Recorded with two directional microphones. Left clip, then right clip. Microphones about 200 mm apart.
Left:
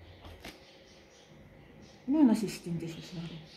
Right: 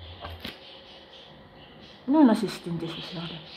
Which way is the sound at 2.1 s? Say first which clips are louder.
Right 6 dB; 15° left (ahead or behind).